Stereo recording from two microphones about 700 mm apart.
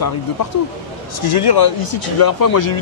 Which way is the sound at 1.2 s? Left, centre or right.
Left.